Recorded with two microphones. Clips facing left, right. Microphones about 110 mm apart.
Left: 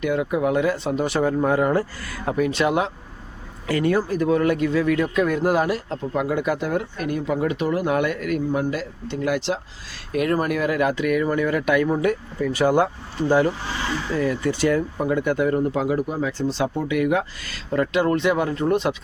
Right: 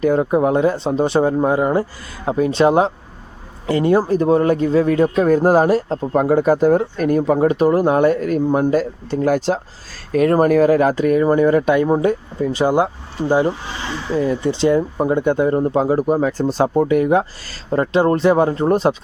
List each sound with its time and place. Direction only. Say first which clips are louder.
0.0 s speech: right 6 dB; 35° right (ahead or behind)